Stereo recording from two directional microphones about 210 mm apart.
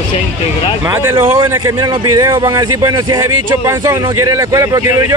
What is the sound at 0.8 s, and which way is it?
Speech, 15° right (ahead or behind).